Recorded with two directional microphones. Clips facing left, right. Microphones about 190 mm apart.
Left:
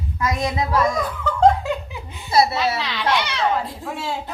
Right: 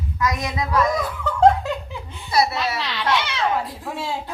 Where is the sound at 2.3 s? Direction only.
25° left (ahead or behind).